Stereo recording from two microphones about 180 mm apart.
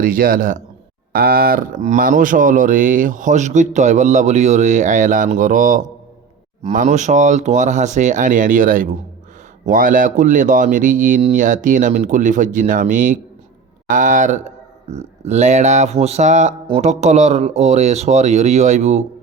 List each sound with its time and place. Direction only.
0.0 s speech: 55° right (ahead or behind)